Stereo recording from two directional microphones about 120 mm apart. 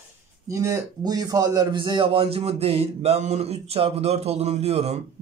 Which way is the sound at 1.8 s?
45° right (ahead or behind).